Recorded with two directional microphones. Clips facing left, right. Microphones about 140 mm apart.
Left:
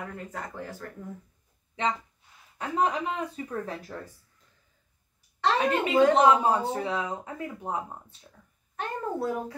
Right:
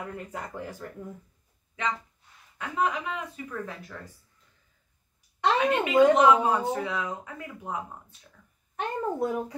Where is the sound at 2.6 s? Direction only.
35° left (ahead or behind).